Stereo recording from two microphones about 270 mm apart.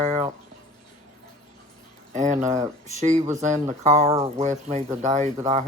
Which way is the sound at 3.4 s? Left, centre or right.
Right.